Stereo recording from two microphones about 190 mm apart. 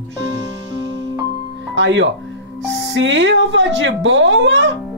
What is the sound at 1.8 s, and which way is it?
Speech, 75° right (ahead or behind).